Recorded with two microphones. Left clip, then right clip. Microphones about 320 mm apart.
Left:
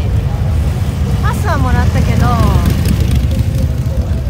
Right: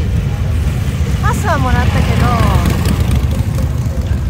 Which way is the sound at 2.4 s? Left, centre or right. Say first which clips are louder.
Right 1 dB; centre.